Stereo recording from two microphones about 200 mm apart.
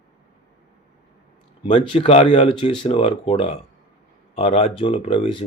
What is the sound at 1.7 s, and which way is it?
Speech, 30° left (ahead or behind).